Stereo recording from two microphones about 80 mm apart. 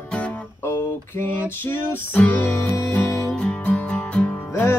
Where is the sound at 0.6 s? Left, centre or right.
Left.